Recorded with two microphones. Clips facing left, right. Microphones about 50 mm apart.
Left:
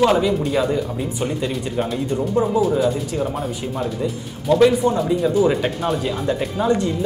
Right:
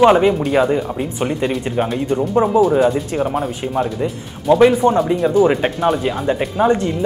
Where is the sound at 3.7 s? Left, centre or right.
Right.